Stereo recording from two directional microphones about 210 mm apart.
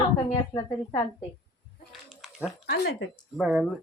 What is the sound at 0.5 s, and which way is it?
Speech, 20° left (ahead or behind).